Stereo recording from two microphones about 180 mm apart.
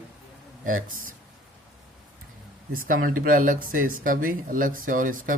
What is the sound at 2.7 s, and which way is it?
Speech, 50° right (ahead or behind).